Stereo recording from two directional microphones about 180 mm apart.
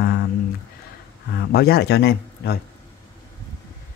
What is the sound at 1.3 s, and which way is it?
Speech, 60° left (ahead or behind).